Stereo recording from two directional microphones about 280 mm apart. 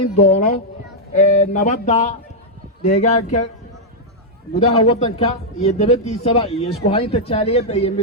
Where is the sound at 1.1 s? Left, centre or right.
Left.